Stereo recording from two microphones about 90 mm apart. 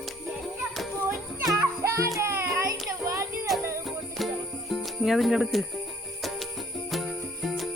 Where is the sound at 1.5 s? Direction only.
35° right (ahead or behind).